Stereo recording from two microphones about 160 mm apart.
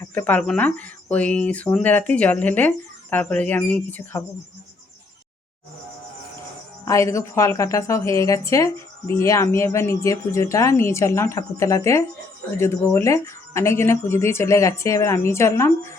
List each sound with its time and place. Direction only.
0.0 s speech: 10° left (ahead or behind)
6.8 s a woman's voice: 20° left (ahead or behind)